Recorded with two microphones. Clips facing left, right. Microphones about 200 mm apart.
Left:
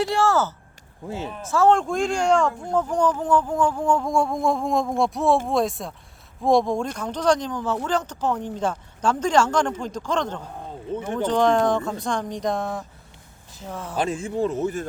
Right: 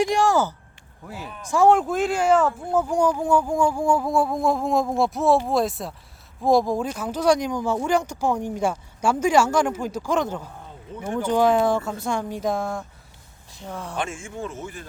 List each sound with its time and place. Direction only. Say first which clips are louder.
0.0 s speech: right 1 dB; 15° right (ahead or behind)
1.0 s speech: left 6 dB; 25° left (ahead or behind)
1.5 s speech: right 1 dB; 15° right (ahead or behind)
13.9 s speech: left 8 dB; 35° left (ahead or behind)